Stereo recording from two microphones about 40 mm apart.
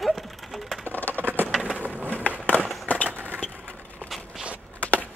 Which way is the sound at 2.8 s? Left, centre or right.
Left.